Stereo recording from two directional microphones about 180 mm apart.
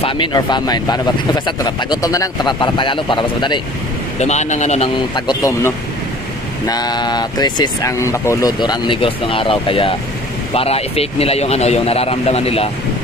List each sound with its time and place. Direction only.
0.0 s speech: 25° left (ahead or behind)
4.2 s speech: 40° left (ahead or behind)
5.1 s speech: 25° left (ahead or behind)